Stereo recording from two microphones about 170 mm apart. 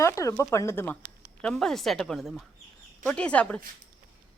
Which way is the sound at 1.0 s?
55° right (ahead or behind).